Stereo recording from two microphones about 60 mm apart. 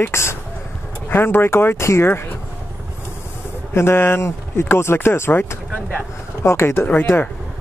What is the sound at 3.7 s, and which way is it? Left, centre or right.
Speech, left.